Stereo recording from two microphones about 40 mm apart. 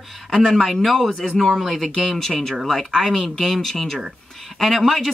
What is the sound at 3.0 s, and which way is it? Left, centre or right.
Speech, centre.